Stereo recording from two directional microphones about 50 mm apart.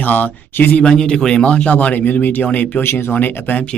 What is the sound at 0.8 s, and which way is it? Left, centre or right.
Speech, centre.